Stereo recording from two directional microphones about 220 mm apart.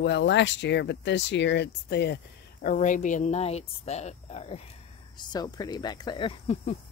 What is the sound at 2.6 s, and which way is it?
Speech, 35° left (ahead or behind).